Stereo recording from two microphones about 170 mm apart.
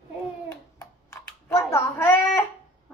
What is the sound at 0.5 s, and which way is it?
Child singing, 15° left (ahead or behind).